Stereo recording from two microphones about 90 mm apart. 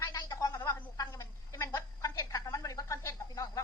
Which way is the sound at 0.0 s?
45° left (ahead or behind).